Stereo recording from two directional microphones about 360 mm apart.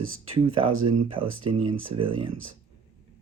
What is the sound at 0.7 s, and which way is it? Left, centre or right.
Speech, right.